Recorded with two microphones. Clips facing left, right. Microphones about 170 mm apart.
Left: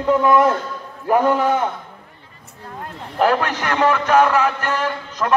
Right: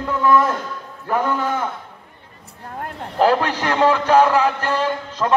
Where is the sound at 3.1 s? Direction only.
30° right (ahead or behind).